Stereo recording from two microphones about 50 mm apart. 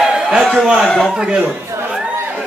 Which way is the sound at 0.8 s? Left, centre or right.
Centre.